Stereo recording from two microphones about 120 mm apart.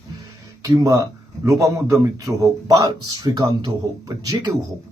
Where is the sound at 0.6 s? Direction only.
30° right (ahead or behind).